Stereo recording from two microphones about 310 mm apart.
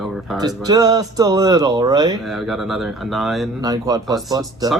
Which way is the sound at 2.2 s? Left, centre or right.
Centre.